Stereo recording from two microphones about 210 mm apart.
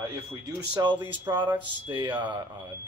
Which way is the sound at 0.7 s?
20° right (ahead or behind).